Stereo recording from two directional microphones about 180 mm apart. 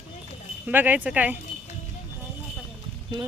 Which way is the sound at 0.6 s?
10° right (ahead or behind).